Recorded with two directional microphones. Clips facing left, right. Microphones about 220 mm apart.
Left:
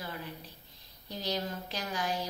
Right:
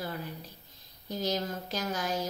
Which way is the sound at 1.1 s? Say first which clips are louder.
Right 3 dB; 45° right (ahead or behind).